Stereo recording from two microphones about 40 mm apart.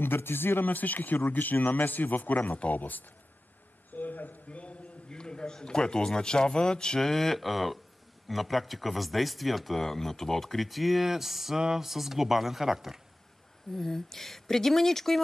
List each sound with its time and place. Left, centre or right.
0.0 s speech: left
0.7 s a man's voice: left
3.9 s a sound: left
4.5 s a sound: left
5.1 s a man's voice: left
7.1 s speech: centre
13.7 s speech: centre